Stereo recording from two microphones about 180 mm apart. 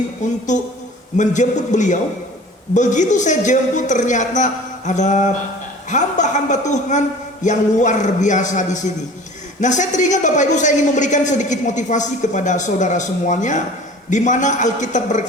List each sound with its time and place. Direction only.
0.2 s a man's voice: 40° left (ahead or behind)